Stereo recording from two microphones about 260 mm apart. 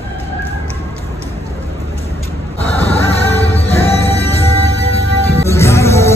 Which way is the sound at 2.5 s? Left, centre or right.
Left.